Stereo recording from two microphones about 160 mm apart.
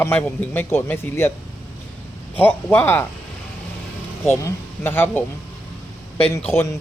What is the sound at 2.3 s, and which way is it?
Speech, 10° left (ahead or behind).